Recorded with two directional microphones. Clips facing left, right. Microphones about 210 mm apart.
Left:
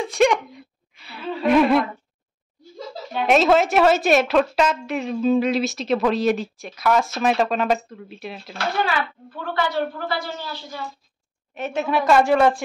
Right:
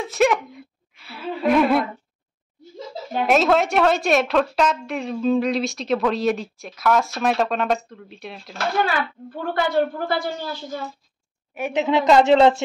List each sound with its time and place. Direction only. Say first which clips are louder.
0.0 s a sound: left 1 dB; 5° right (ahead or behind)
3.3 s a woman's voice: left 2 dB; centre (ahead or behind)
9.3 s a woman's voice: right 3 dB; 50° right (ahead or behind)
11.5 s a woman's voice: right 2 dB; 15° right (ahead or behind)